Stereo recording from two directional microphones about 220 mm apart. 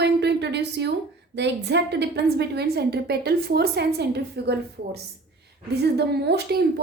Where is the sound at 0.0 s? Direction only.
50° right (ahead or behind).